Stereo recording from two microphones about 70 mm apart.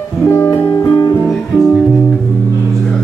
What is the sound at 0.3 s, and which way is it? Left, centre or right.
Music, left.